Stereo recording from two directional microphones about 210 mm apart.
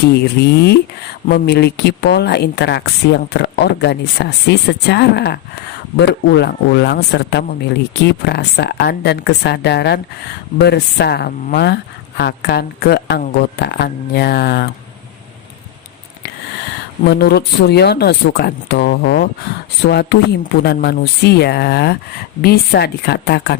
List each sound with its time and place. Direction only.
0.1 s speech: 50° left (ahead or behind)
17.1 s speech: 50° left (ahead or behind)